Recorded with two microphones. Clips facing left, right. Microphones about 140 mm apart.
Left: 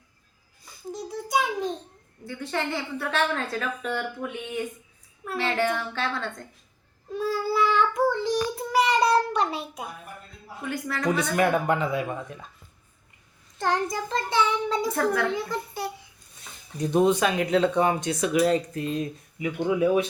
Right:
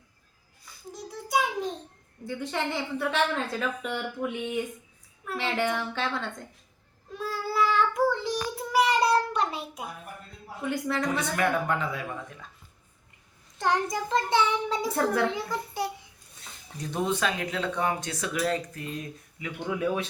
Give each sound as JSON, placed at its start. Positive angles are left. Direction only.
{"t": 1.0, "sound": "a sound", "side_deg": 0}
{"t": 2.2, "sound": "a woman's voice", "side_deg": -15}
{"t": 7.2, "sound": "child singing", "side_deg": 0}
{"t": 10.6, "sound": "a child's voice", "side_deg": -20}
{"t": 11.3, "sound": "speech", "side_deg": 20}
{"t": 13.6, "sound": "a woman's voice", "side_deg": -15}
{"t": 14.8, "sound": "a child's voice", "side_deg": -30}
{"t": 15.4, "sound": "a woman's voice", "side_deg": -15}
{"t": 16.4, "sound": "speech", "side_deg": 20}
{"t": 19.6, "sound": "speech", "side_deg": 15}